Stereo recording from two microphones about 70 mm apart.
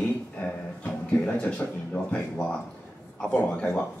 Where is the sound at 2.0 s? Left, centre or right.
Centre.